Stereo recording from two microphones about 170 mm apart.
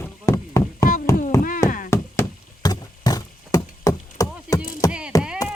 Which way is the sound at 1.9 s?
20° left (ahead or behind).